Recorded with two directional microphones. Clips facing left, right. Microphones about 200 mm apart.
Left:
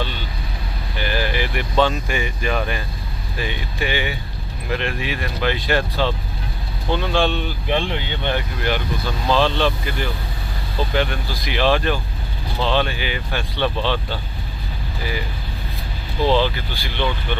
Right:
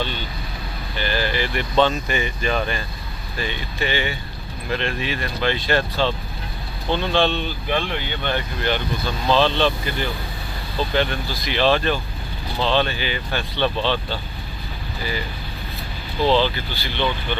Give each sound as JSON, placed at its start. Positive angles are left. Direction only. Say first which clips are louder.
{"t": 0.9, "sound": "speech", "louder": "even", "side_deg": 15}
{"t": 7.7, "sound": "speech", "louder": "left 2 dB", "side_deg": 25}
{"t": 16.3, "sound": "speech", "louder": "even", "side_deg": 10}